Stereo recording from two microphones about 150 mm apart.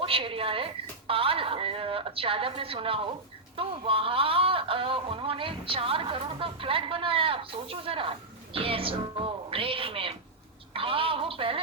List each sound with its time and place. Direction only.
0.0 s a woman's voice: 35° right (ahead or behind)